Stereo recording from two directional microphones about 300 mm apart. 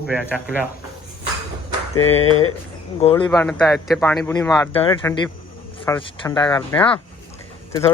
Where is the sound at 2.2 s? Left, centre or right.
Left.